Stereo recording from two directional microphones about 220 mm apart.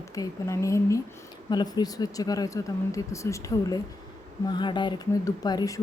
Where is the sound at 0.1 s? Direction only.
15° left (ahead or behind).